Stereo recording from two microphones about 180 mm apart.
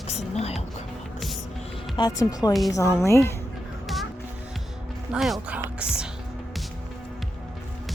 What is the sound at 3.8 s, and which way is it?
Music, centre (ahead or behind).